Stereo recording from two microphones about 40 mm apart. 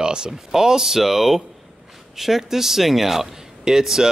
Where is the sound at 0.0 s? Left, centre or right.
Centre.